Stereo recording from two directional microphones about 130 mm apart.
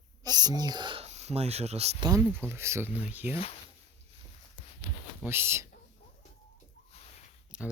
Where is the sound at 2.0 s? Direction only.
30° right (ahead or behind).